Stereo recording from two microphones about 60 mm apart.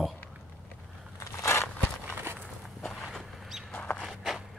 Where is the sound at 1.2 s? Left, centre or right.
Left.